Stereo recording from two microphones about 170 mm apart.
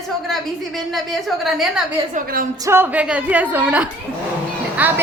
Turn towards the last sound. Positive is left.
turn(degrees=-10)  # may be behind; listen again after turning